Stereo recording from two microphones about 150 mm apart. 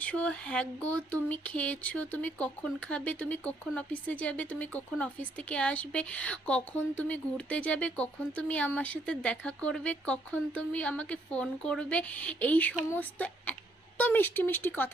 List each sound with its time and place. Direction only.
0.0 s speech: 10° left (ahead or behind)